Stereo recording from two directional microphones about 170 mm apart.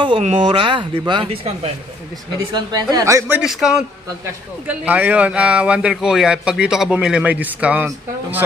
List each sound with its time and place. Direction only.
0.0 s a man's voice: 35° right (ahead or behind); by 8.4 s 10° right (ahead or behind)